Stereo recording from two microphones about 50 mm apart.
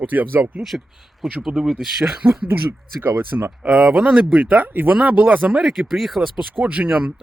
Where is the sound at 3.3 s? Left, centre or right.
Right.